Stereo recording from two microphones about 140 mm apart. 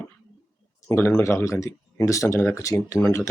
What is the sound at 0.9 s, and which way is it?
Speech, 15° left (ahead or behind).